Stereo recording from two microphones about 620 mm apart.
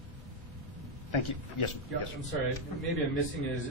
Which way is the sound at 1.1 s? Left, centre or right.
Left.